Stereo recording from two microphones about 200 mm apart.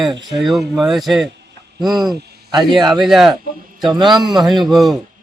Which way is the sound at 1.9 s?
20° right (ahead or behind).